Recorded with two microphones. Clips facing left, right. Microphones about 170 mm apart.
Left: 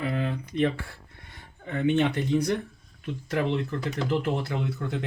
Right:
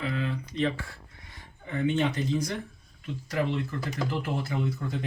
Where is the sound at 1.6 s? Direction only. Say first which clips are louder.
Left 3 dB; 60° left (ahead or behind).